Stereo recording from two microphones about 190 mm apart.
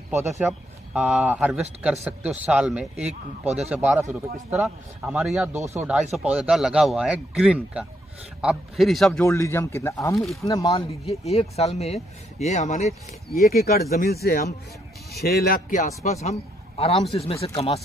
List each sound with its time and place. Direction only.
0.9 s speech: 5° right (ahead or behind)
3.1 s speech: 35° right (ahead or behind)
3.7 s speech: 10° right (ahead or behind)
9.2 s speech: 15° left (ahead or behind)
10.1 s speech: centre (ahead or behind)
10.4 s speech: 15° left (ahead or behind)
11.2 s speech: 35° left (ahead or behind)
13.5 s a man's voice: 55° left (ahead or behind); by 17.7 s 30° left (ahead or behind)